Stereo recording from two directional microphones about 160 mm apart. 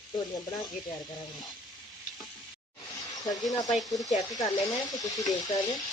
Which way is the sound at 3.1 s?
25° left (ahead or behind).